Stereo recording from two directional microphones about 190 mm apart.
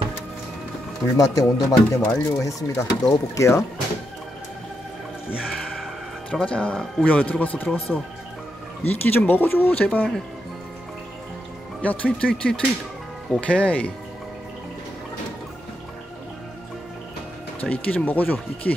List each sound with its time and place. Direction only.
1.1 s speech: 20° left (ahead or behind)
5.3 s music: centre (ahead or behind)
6.3 s speech: 5° left (ahead or behind)
9.0 s speech: 10° left (ahead or behind)
11.8 s speech: 10° left (ahead or behind)
17.6 s speech: 10° left (ahead or behind)